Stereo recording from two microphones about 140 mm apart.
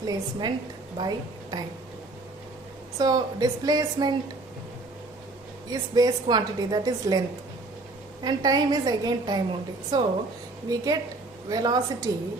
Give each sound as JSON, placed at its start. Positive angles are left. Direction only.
{"t": 0.0, "sound": "a woman's voice", "side_deg": -30}
{"t": 3.0, "sound": "a woman's voice", "side_deg": -25}
{"t": 5.7, "sound": "a woman's voice", "side_deg": -25}
{"t": 8.2, "sound": "a woman's voice", "side_deg": -30}